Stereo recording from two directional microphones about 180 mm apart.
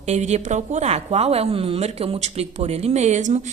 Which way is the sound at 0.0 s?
40° right (ahead or behind).